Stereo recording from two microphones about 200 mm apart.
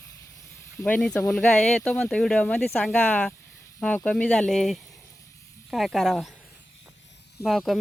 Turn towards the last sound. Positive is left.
turn(degrees=0)  # may be behind; listen again after turning